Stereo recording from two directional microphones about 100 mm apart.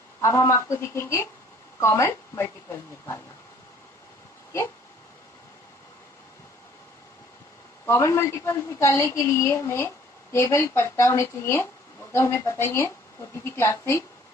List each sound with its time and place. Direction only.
0.2 s a woman's voice: 30° left (ahead or behind)
7.8 s a woman's voice: 25° left (ahead or behind)